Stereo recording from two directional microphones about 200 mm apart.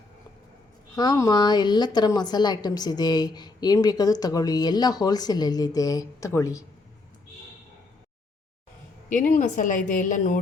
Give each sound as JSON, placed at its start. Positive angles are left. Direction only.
{"t": 0.9, "sound": "a woman's voice", "side_deg": 15}
{"t": 9.0, "sound": "a woman's voice", "side_deg": 40}